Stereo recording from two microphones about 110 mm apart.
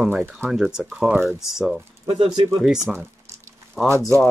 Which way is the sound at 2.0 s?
45° right (ahead or behind).